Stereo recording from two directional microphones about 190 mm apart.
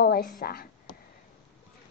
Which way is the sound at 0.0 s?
55° left (ahead or behind).